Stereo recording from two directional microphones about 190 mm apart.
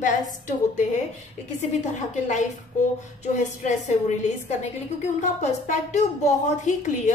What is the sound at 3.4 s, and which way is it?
A woman's voice, 40° left (ahead or behind).